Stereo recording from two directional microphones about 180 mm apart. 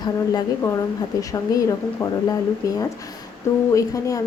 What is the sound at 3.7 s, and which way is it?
Speech, 20° left (ahead or behind).